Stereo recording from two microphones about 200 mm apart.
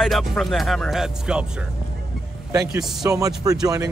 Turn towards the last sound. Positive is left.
turn(degrees=-15)  # may be behind; listen again after turning